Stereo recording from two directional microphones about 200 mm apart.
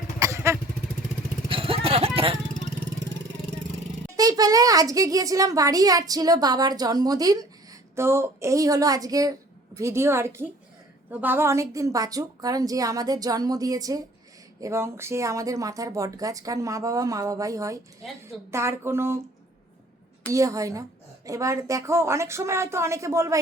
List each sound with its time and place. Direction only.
0.2 s motorcycle: 15° right (ahead or behind)
1.5 s vehicle: 25° right (ahead or behind)
4.2 s a woman's voice: 20° right (ahead or behind)
20.2 s a woman's voice: 15° right (ahead or behind)